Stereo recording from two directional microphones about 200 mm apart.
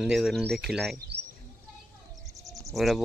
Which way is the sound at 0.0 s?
Centre (ahead or behind).